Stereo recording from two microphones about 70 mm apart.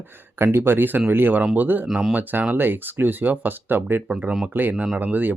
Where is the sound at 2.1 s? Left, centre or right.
Right.